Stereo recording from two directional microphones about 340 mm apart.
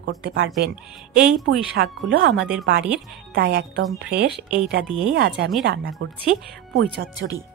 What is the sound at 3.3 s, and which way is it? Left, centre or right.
A woman's voice, right.